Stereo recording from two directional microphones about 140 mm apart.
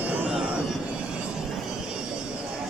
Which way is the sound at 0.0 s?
10° right (ahead or behind).